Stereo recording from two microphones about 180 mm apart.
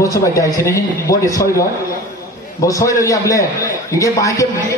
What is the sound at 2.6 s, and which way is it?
A man's voice, 20° left (ahead or behind).